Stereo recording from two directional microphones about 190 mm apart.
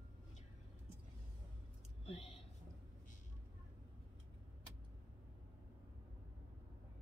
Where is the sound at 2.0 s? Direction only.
30° left (ahead or behind).